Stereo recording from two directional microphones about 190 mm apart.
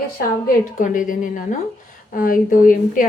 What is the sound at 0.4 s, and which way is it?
A woman's voice, 45° left (ahead or behind).